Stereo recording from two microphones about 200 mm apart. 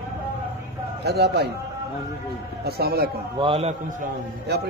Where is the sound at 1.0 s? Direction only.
55° right (ahead or behind).